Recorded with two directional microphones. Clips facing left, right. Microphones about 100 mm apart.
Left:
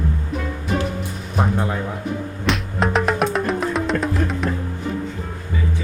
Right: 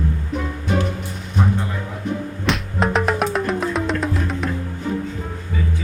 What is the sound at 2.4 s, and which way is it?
Music, centre (ahead or behind).